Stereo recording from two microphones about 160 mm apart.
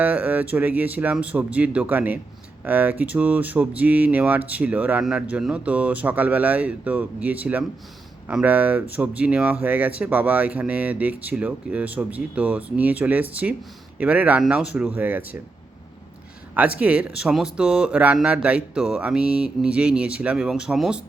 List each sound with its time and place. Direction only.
0.0 s speech: 10° right (ahead or behind)
16.6 s speech: 10° right (ahead or behind)